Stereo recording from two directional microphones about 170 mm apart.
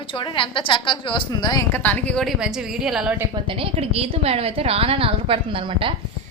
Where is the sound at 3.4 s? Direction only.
30° right (ahead or behind).